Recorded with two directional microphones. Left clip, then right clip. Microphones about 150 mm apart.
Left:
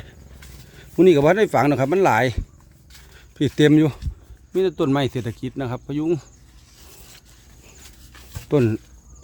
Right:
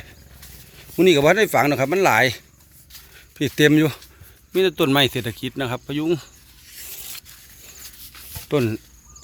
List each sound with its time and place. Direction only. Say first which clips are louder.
0.8 s speech: left 1 dB; 20° left (ahead or behind)
4.5 s speech: right 2 dB; centre (ahead or behind)
8.4 s speech: left 2 dB; 25° left (ahead or behind)